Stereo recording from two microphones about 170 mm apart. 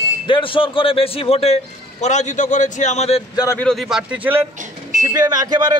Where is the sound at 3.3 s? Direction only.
15° left (ahead or behind).